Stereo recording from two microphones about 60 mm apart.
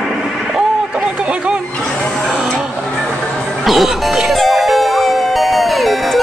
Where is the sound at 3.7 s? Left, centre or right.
Centre.